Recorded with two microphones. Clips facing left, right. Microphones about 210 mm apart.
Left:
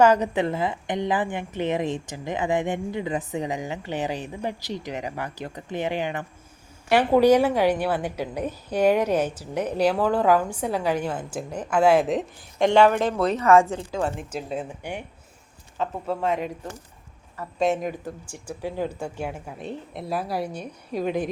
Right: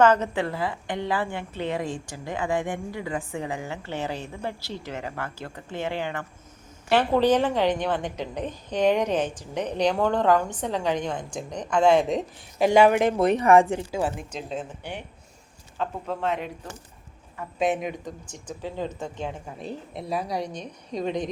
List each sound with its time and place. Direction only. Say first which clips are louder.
0.0 s a woman's voice: left 2 dB; 15° left (ahead or behind); by 14.3 s 10° right (ahead or behind)
14.3 s a woman's voice: left 2 dB; 5° left (ahead or behind)